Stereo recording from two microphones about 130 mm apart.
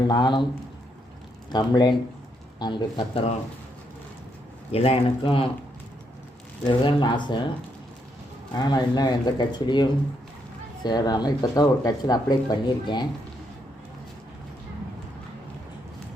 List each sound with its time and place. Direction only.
0.0 s speech: 35° left (ahead or behind)
1.5 s speech: 35° left (ahead or behind)
4.7 s speech: 50° left (ahead or behind)
6.7 s speech: 35° left (ahead or behind)
8.5 s speech: 35° left (ahead or behind)